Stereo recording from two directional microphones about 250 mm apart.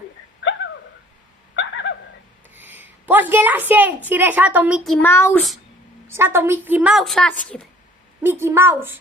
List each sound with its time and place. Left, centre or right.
0.4 s a sound: left
2.5 s a woman's voice: centre
6.1 s a woman's voice: centre
8.2 s a woman's voice: centre